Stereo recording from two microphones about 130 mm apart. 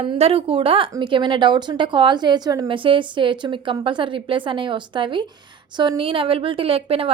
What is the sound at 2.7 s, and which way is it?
A woman's voice, 40° right (ahead or behind).